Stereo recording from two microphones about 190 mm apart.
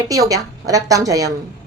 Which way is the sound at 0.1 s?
20° right (ahead or behind).